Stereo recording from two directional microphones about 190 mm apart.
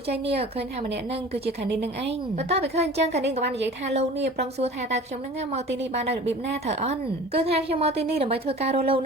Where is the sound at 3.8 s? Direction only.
35° right (ahead or behind).